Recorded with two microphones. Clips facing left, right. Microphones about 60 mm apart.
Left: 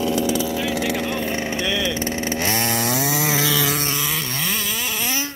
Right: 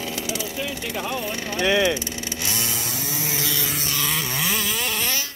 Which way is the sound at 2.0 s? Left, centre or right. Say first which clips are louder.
Left 7 dB; left.